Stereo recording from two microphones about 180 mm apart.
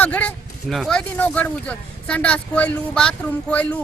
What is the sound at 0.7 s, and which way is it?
A man's voice, centre (ahead or behind).